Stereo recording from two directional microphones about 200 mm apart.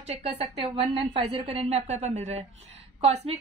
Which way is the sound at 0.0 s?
30° right (ahead or behind).